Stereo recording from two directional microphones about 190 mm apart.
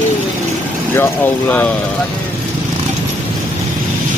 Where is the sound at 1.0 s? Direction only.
10° left (ahead or behind).